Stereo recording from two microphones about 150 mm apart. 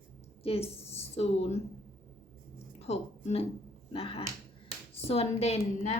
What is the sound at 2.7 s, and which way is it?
A woman's voice, 45° left (ahead or behind).